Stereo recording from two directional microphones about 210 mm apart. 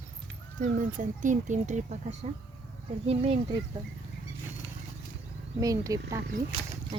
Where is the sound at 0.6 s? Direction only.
40° right (ahead or behind).